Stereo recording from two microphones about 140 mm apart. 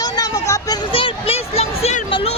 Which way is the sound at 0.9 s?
40° left (ahead or behind).